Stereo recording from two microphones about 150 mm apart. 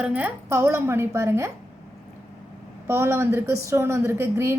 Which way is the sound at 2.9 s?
20° right (ahead or behind).